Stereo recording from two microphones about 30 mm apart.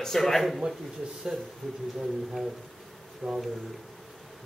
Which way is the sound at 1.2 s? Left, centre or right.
Right.